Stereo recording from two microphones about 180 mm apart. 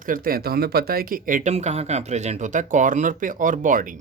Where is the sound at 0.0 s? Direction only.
50° right (ahead or behind).